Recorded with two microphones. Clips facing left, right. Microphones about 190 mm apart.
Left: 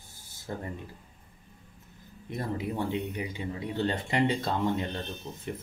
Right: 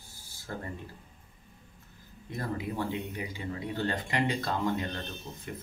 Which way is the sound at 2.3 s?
20° left (ahead or behind).